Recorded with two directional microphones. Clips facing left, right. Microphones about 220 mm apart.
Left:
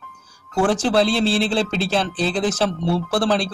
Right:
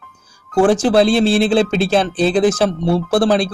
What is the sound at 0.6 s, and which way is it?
Speech, 15° right (ahead or behind).